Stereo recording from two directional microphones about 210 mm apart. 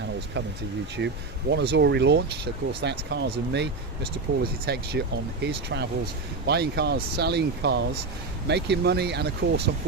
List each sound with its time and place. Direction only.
0.9 s speech: 55° right (ahead or behind)